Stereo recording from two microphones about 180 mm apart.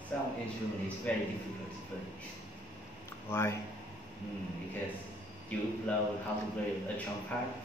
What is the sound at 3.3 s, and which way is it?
Speech, 15° left (ahead or behind).